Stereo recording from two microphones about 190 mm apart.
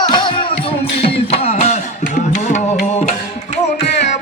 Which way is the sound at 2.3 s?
35° left (ahead or behind).